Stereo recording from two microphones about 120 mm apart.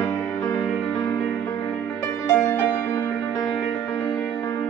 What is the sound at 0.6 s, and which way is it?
Music, 35° left (ahead or behind).